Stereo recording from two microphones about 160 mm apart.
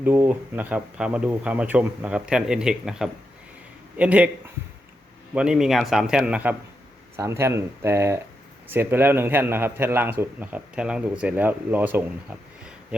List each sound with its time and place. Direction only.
0.0 s a man's voice: 10° right (ahead or behind)
5.3 s a man's voice: 5° right (ahead or behind)